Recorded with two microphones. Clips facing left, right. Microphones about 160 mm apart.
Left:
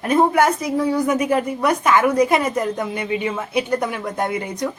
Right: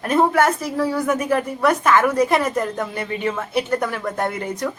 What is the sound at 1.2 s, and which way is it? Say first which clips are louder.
Speech: left 1 dB; 15° left (ahead or behind).